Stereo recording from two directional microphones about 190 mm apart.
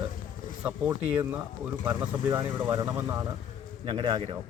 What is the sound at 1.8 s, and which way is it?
Speech, 10° right (ahead or behind).